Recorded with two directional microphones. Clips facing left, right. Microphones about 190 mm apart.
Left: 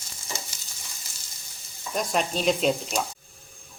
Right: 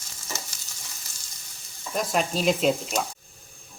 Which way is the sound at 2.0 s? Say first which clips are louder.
Right 1 dB; centre (ahead or behind).